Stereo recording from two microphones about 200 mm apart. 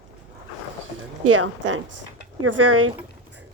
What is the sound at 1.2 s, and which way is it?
Speech, 90° right.